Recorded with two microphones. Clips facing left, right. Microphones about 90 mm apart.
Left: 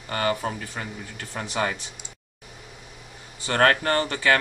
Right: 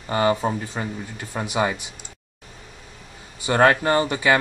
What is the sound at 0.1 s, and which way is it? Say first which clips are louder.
Speech: right 5 dB; 20° right (ahead or behind).